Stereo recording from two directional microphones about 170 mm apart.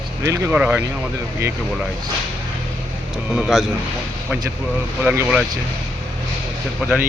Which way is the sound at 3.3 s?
5° right (ahead or behind).